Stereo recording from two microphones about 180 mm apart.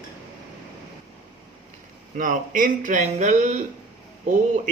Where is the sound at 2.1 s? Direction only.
45° right (ahead or behind).